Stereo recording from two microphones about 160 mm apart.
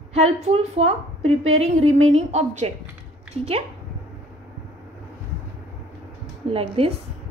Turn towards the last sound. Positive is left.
turn(degrees=-35)  # may be behind; listen again after turning